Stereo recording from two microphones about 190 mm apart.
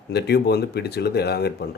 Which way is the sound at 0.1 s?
60° left (ahead or behind).